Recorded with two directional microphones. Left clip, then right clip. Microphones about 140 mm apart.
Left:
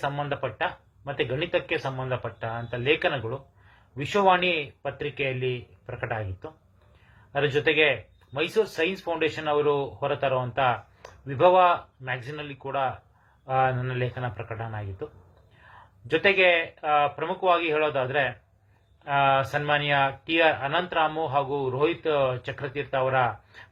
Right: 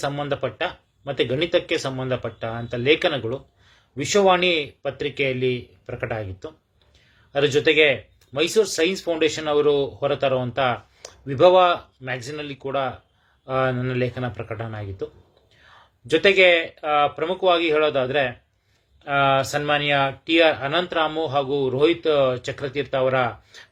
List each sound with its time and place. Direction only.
0.0 s speech: 35° right (ahead or behind)
16.0 s speech: 35° right (ahead or behind)